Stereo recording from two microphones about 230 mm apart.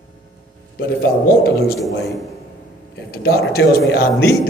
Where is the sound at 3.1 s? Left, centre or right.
Left.